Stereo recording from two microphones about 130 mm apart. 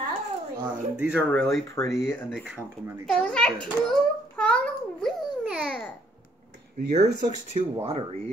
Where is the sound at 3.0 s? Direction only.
5° left (ahead or behind).